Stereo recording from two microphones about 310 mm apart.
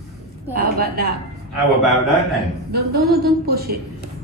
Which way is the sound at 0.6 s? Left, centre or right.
Right.